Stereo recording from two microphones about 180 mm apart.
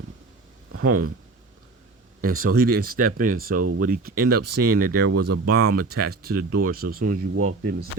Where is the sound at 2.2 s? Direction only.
50° right (ahead or behind).